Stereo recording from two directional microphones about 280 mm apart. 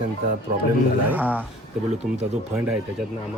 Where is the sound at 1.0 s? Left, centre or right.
Centre.